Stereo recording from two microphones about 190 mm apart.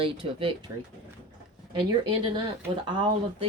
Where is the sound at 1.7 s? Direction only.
25° right (ahead or behind).